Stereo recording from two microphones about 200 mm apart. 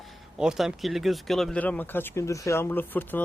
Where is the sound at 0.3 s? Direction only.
5° right (ahead or behind).